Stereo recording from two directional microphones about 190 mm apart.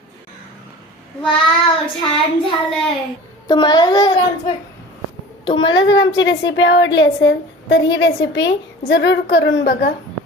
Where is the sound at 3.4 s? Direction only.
20° left (ahead or behind).